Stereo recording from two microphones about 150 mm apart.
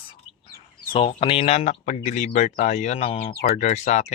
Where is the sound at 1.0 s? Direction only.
35° left (ahead or behind).